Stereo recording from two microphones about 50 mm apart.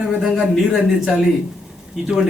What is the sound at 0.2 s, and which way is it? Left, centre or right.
Speech, centre.